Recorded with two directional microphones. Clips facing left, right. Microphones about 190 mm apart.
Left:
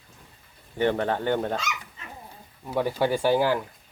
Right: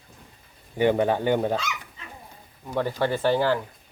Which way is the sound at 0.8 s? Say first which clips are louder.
Right 3 dB; 10° right (ahead or behind).